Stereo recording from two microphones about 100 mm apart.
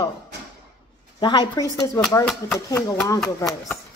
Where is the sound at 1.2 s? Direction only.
50° left (ahead or behind).